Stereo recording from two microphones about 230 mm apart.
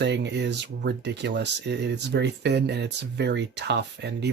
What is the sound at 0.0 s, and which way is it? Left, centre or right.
Speech, right.